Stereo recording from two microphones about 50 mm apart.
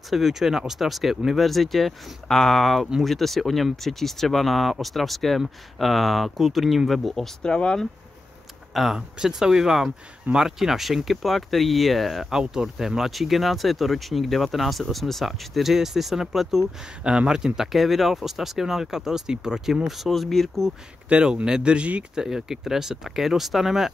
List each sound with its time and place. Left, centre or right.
0.1 s speech: centre
7.4 s speech: centre
8.7 s speech: centre
12.3 s speech: centre
17.0 s speech: centre
17.6 s speech: centre
21.1 s speech: right
22.1 s speech: centre